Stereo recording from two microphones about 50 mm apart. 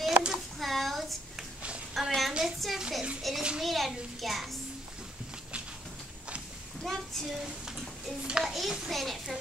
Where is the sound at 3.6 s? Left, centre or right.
Centre.